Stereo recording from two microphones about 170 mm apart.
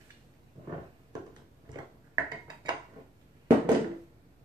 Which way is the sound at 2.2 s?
25° right (ahead or behind).